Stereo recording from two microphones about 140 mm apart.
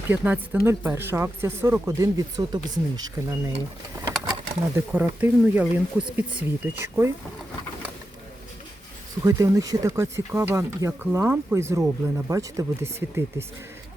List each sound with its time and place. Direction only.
0.1 s speech: 10° right (ahead or behind)
9.2 s speech: 25° right (ahead or behind)